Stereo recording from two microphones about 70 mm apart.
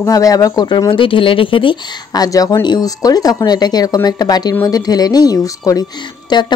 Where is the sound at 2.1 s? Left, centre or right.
Left.